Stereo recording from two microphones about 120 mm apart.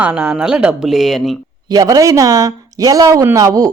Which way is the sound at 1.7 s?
30° right (ahead or behind).